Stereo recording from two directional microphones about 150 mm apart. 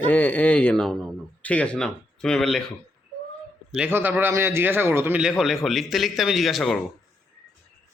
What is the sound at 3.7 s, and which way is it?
Speech, 10° right (ahead or behind).